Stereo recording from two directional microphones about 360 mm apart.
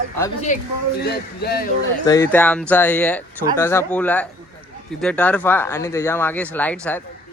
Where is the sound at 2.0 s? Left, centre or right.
Centre.